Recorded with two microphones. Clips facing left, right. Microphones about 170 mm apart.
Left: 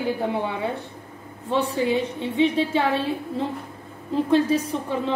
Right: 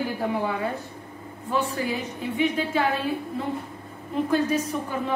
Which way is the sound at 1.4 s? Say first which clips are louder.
Left 4 dB; 30° left (ahead or behind).